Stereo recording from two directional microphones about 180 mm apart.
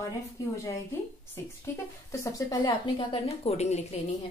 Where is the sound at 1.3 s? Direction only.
15° left (ahead or behind); by 3.8 s 40° left (ahead or behind).